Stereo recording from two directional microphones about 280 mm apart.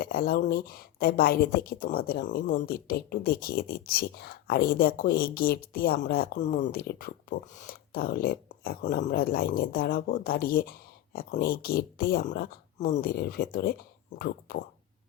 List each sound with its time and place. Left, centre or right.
0.0 s speech: left